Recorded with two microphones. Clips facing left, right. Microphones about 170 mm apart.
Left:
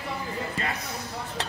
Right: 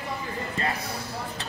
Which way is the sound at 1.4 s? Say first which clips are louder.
Left 4 dB; 75° left (ahead or behind).